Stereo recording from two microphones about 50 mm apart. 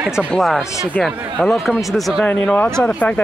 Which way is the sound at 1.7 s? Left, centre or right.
Centre.